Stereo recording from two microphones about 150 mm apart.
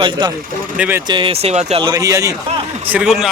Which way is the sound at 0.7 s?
10° right (ahead or behind).